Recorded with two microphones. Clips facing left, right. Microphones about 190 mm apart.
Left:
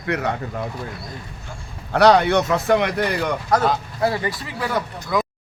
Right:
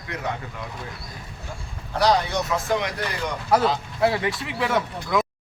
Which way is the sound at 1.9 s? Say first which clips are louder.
Left 7 dB; 65° left (ahead or behind).